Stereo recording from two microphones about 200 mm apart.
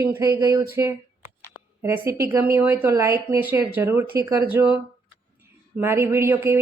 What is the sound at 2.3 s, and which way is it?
A woman's voice, 15° right (ahead or behind).